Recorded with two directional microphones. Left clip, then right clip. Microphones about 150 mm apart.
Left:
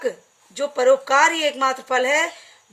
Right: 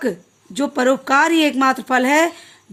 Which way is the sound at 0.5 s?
60° right (ahead or behind).